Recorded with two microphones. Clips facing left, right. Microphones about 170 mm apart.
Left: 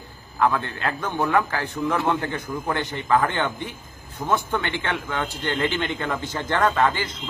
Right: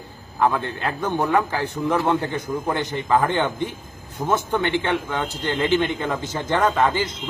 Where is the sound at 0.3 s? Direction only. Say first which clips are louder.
Right 1 dB; 15° right (ahead or behind).